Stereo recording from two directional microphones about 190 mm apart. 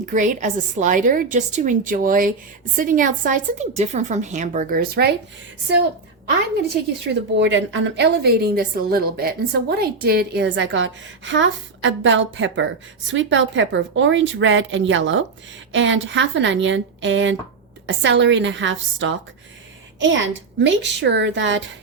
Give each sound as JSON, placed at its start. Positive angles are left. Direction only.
{"t": 0.0, "sound": "a woman's voice", "side_deg": -40}
{"t": 7.1, "sound": "a woman's voice", "side_deg": -70}